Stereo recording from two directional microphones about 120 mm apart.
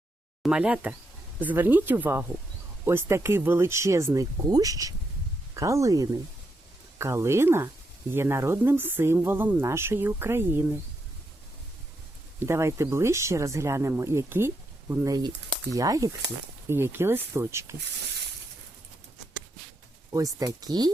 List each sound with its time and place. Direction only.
0.4 s speech: 10° right (ahead or behind)
12.5 s speech: 25° right (ahead or behind)
20.1 s speech: 30° right (ahead or behind)